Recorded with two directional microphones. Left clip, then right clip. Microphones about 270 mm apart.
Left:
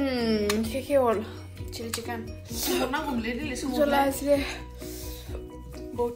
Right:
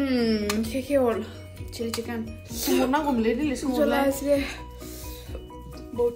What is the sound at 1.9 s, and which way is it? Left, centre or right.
Speech, centre.